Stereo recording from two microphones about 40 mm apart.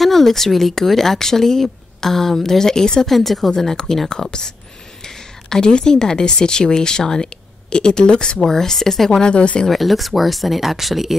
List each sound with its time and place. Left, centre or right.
0.0 s a woman's voice: centre
9.1 s speech: left
9.7 s speech: centre